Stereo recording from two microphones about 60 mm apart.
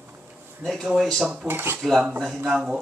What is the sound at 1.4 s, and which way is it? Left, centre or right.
Speech, right.